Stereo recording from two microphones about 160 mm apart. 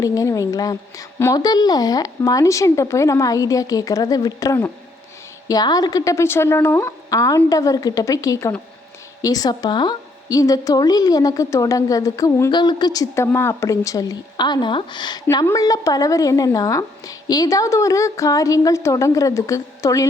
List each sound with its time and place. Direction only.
0.0 s a woman's voice: 20° left (ahead or behind)